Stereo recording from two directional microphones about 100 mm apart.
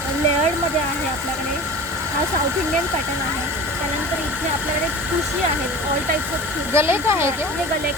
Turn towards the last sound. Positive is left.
turn(degrees=-25)  # may be behind; listen again after turning